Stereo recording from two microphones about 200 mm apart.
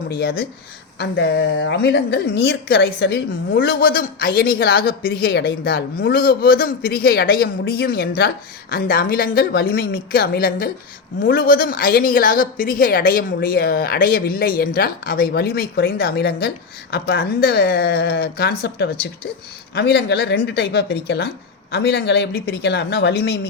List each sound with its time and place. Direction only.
0.1 s a woman's voice: 50° left (ahead or behind)